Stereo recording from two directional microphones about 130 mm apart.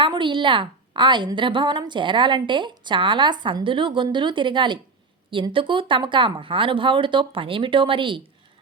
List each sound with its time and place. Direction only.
0.0 s a woman's voice: 40° right (ahead or behind)